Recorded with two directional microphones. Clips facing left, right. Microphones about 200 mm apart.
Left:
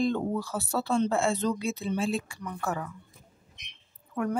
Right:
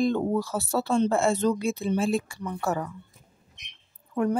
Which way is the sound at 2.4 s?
35° right (ahead or behind).